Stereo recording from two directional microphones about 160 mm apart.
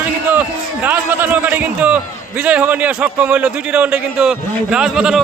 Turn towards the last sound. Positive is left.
turn(degrees=-5)  # may be behind; listen again after turning